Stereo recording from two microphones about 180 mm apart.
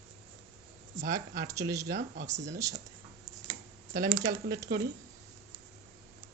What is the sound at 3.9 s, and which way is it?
Speech, 45° right (ahead or behind).